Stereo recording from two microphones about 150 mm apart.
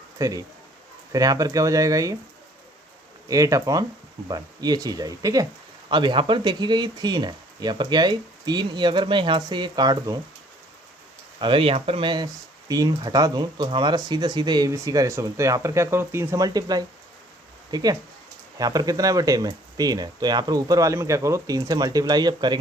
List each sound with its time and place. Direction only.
0.2 s speech: 25° right (ahead or behind)
3.2 s speech: 20° right (ahead or behind)
11.3 s speech: 35° right (ahead or behind)